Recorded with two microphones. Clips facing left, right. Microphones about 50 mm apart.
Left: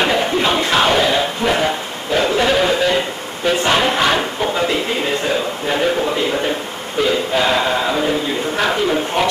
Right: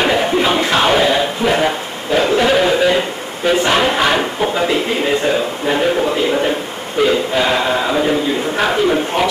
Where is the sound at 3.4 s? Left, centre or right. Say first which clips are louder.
Right 2 dB; centre.